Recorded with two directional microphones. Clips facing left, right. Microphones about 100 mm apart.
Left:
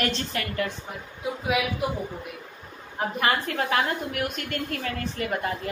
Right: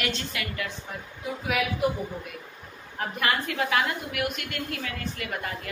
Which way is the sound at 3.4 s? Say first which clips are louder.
Left 1 dB; 40° left (ahead or behind).